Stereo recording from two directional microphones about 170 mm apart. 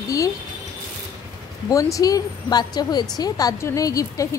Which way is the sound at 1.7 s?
20° left (ahead or behind).